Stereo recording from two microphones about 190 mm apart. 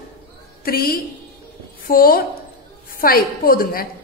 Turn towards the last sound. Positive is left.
turn(degrees=50)  # may be behind; listen again after turning